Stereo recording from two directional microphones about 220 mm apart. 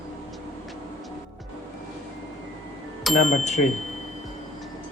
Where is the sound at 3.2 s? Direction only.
30° left (ahead or behind).